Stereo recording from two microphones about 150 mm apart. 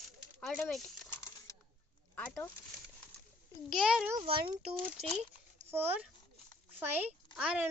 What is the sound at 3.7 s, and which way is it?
Speech, 5° right (ahead or behind).